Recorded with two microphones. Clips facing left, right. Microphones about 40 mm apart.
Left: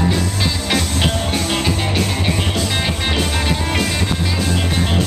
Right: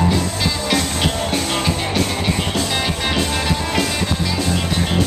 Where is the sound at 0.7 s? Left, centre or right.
Centre.